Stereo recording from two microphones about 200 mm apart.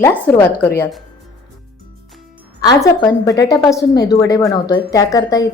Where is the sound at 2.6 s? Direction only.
20° left (ahead or behind).